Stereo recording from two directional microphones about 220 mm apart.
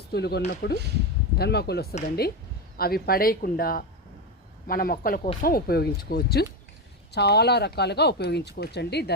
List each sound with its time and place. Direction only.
0.1 s speech: 50° left (ahead or behind)